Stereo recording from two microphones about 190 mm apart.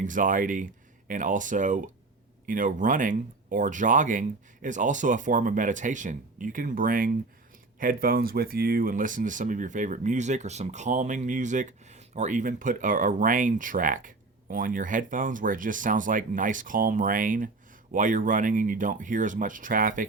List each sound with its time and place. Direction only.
0.0 s speech: 45° right (ahead or behind)